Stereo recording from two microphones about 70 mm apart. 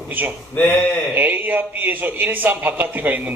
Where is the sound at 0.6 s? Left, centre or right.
Left.